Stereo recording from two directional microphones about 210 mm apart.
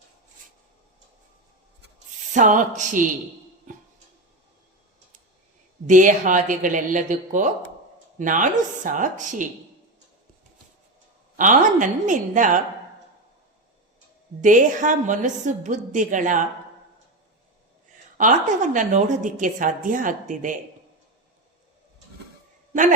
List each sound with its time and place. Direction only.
2.3 s a woman's voice: 35° right (ahead or behind)
5.8 s a woman's voice: 40° right (ahead or behind)
11.3 s a woman's voice: 40° right (ahead or behind)
14.4 s a woman's voice: 35° right (ahead or behind)
18.2 s a woman's voice: 35° right (ahead or behind)